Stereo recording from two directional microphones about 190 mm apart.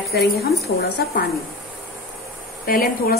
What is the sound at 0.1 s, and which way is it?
Speech, 55° left (ahead or behind).